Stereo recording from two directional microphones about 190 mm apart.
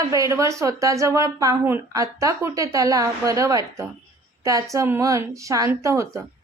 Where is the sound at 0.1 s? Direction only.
15° right (ahead or behind).